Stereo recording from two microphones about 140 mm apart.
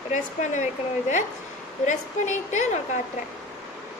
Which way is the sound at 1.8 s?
60° left (ahead or behind).